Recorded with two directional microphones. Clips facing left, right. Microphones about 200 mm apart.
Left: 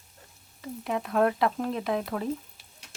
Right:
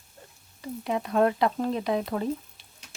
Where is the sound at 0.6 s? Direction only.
Centre (ahead or behind).